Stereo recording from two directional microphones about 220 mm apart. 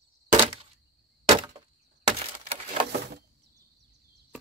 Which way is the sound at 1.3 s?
25° right (ahead or behind).